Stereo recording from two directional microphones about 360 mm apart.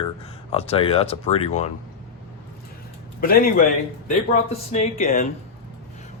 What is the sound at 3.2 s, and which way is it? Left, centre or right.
Speech, left.